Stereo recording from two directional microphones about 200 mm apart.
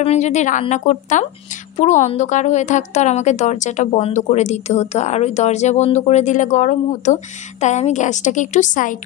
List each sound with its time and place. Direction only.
0.0 s a woman's voice: 35° left (ahead or behind)